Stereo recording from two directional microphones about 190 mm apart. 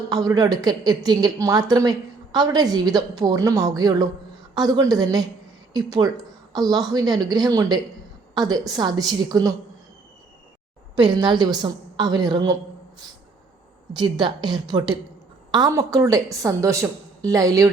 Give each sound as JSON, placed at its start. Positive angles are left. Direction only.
{"t": 0.1, "sound": "a woman's voice", "side_deg": -20}
{"t": 10.9, "sound": "a woman's voice", "side_deg": -25}
{"t": 13.9, "sound": "a woman's voice", "side_deg": -25}